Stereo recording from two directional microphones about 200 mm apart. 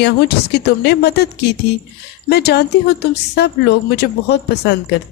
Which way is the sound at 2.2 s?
55° left (ahead or behind).